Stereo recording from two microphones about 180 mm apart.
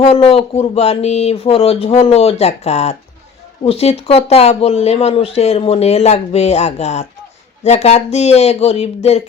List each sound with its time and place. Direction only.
0.1 s speech: 35° left (ahead or behind)